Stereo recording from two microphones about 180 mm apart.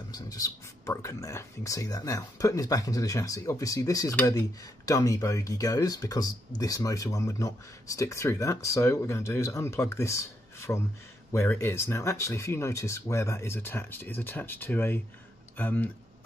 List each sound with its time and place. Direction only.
0.1 s speech: 20° left (ahead or behind)